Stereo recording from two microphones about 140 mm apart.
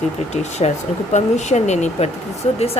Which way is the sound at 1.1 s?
55° left (ahead or behind).